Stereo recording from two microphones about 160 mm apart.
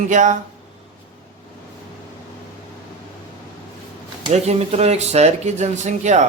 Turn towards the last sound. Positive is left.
turn(degrees=-45)  # may be behind; listen again after turning